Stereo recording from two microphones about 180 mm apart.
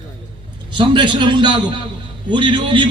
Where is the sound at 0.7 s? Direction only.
25° right (ahead or behind).